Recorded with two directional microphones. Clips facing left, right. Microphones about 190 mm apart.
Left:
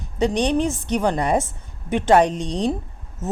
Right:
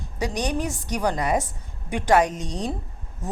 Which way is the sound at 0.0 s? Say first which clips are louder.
Left 7 dB; 25° left (ahead or behind).